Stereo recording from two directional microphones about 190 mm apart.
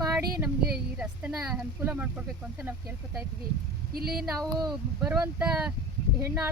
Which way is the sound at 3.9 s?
55° right (ahead or behind).